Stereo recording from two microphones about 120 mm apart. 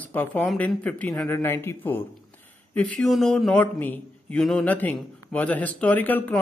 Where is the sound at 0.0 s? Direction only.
15° left (ahead or behind).